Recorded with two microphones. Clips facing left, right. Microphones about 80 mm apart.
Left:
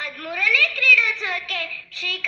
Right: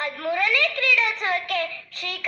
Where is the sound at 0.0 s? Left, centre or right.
Right.